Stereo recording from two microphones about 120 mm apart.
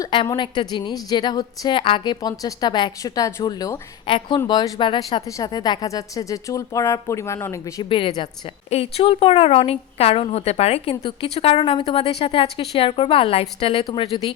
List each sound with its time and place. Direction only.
0.1 s a woman's voice: 40° left (ahead or behind)
4.0 s a woman's voice: 45° left (ahead or behind); by 7.9 s 25° left (ahead or behind)
7.9 s a woman's voice: 45° left (ahead or behind)
8.7 s a woman's voice: 55° left (ahead or behind)